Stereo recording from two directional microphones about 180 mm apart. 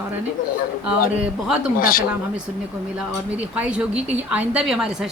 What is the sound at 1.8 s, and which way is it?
Speech, 50° left (ahead or behind).